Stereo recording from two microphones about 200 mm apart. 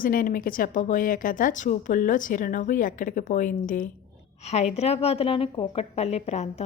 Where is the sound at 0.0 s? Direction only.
45° left (ahead or behind).